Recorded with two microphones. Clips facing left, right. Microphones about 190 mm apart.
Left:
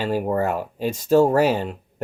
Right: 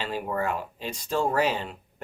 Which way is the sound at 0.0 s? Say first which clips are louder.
Left 7 dB; 45° left (ahead or behind).